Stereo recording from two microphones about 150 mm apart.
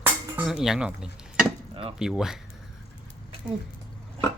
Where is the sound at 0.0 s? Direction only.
5° right (ahead or behind).